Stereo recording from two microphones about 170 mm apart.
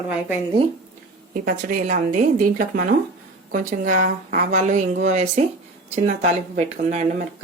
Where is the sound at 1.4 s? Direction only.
55° right (ahead or behind).